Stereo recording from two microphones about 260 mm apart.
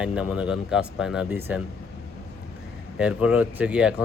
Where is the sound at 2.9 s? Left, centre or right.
Centre.